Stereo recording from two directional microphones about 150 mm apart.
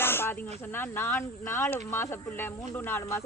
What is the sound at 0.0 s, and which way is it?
Speech, 15° left (ahead or behind).